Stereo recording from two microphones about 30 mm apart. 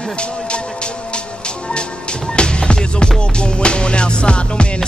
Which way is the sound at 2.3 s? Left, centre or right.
Left.